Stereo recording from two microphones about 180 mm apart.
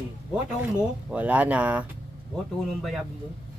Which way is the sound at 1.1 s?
10° right (ahead or behind).